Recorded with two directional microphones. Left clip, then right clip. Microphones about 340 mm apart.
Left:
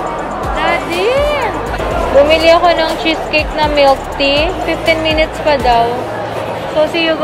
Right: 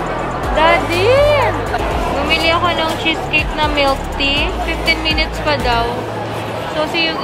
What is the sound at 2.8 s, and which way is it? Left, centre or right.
Speech, centre.